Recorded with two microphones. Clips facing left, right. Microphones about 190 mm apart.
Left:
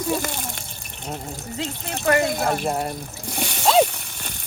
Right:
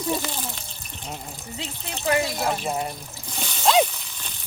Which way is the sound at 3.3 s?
60° left (ahead or behind).